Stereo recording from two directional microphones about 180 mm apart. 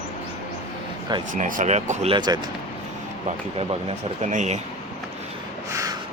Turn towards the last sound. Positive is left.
turn(degrees=-40)  # may be behind; listen again after turning